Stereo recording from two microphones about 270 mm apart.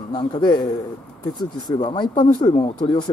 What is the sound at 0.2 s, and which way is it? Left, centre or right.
Speech, centre.